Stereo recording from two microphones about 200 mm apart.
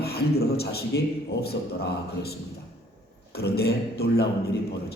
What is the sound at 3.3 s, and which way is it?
Speech, 50° left (ahead or behind).